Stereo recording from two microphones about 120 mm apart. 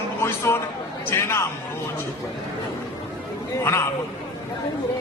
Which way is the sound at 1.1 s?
20° left (ahead or behind).